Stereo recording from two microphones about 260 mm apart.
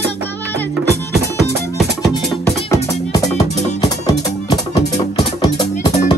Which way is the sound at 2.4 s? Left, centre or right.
Centre.